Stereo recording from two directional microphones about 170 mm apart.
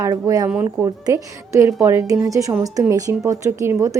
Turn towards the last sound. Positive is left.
turn(degrees=-15)  # may be behind; listen again after turning